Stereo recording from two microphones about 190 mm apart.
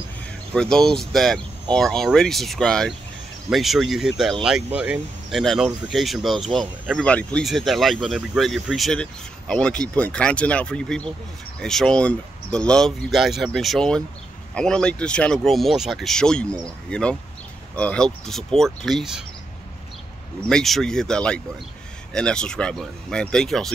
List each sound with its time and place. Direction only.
0.6 s speech: 5° left (ahead or behind)
20.4 s speech: centre (ahead or behind)